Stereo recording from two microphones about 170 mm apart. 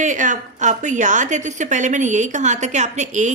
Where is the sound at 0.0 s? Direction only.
50° right (ahead or behind).